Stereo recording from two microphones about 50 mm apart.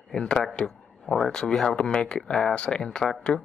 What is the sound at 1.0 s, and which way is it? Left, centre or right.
Speech, centre.